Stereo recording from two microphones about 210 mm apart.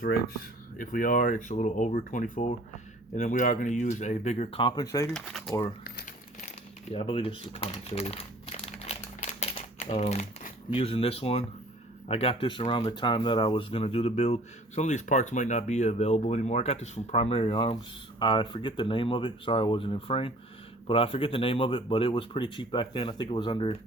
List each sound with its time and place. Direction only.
0.8 s speech: 40° left (ahead or behind); by 5.1 s 15° left (ahead or behind)
5.1 s speech: centre (ahead or behind)
6.9 s crumpling: 25° left (ahead or behind)
10.7 s speech: 25° left (ahead or behind)